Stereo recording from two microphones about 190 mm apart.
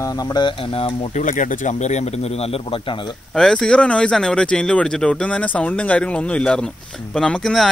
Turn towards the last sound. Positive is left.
turn(degrees=0)  # may be behind; listen again after turning